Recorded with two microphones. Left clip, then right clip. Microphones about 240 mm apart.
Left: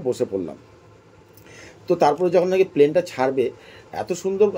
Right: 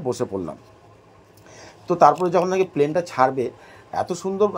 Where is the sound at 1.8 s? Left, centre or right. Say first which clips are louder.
Right 2 dB; right.